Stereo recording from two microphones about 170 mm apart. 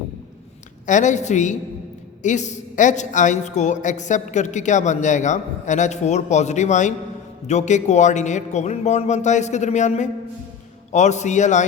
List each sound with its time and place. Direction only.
0.9 s a woman's voice: 45° left (ahead or behind)